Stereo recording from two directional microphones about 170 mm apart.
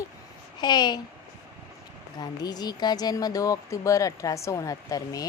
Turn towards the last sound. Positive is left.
turn(degrees=20)  # may be behind; listen again after turning